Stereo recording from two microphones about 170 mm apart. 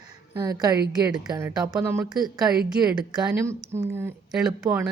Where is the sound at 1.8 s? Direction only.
15° right (ahead or behind).